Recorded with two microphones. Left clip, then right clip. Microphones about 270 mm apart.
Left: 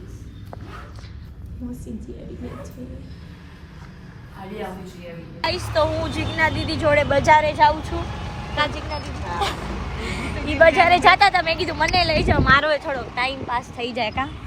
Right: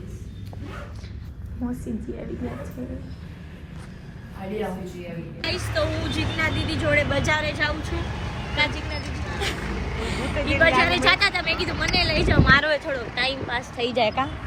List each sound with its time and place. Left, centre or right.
1.9 s speech: centre
5.4 s speech: centre
14.0 s a woman's voice: left